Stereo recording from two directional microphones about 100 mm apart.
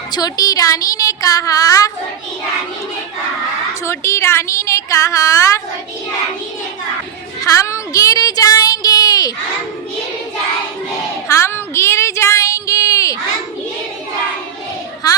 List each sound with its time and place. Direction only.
0.1 s speech: 40° left (ahead or behind)
3.8 s a woman's voice: 30° left (ahead or behind)
7.6 s speech: 30° left (ahead or behind)
11.3 s child singing: 25° left (ahead or behind)